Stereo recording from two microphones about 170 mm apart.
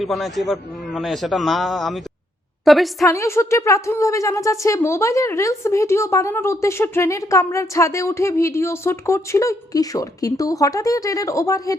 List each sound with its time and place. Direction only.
0.0 s a man's voice: centre (ahead or behind)
3.0 s a woman's voice: 15° left (ahead or behind)